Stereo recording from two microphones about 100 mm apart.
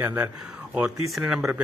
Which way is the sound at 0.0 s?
20° right (ahead or behind).